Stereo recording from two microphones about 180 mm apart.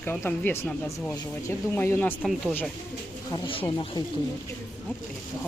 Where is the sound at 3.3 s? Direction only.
30° left (ahead or behind).